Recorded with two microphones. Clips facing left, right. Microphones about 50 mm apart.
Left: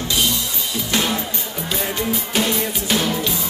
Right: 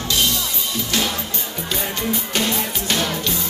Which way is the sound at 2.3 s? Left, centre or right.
Centre.